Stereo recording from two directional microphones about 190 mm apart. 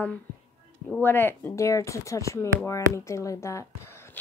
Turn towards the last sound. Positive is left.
turn(degrees=15)  # may be behind; listen again after turning